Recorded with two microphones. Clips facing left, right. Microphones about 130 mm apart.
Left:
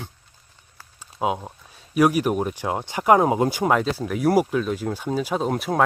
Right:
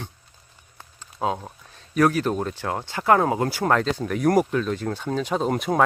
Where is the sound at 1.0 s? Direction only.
10° left (ahead or behind).